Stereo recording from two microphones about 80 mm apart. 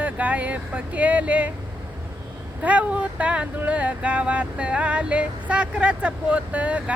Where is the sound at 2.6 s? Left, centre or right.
Centre.